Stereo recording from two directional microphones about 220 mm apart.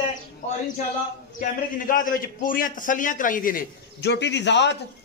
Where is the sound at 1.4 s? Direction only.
35° left (ahead or behind).